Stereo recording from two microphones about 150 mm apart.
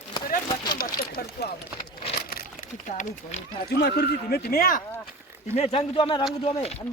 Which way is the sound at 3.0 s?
60° left (ahead or behind).